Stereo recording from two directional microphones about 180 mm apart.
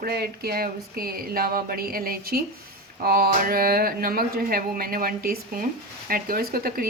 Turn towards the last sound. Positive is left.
turn(degrees=-55)  # may be behind; listen again after turning